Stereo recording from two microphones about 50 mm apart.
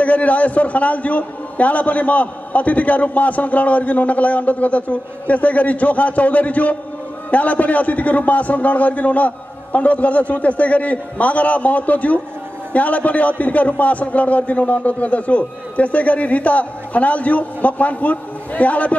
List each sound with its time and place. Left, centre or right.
0.0 s a man's voice: left